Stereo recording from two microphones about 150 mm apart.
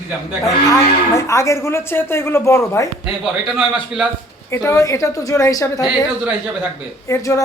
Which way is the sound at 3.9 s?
5° right (ahead or behind).